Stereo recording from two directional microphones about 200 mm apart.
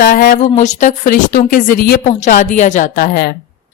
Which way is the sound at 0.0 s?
45° left (ahead or behind).